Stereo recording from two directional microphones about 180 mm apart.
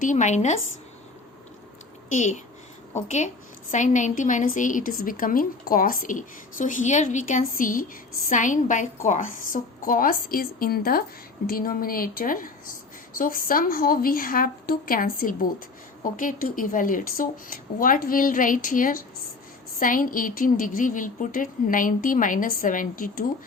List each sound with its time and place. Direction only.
0.0 s a woman's voice: 45° left (ahead or behind)
2.0 s a woman's voice: 45° left (ahead or behind)